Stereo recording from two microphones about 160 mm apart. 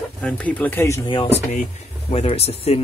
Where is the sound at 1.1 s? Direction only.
30° left (ahead or behind).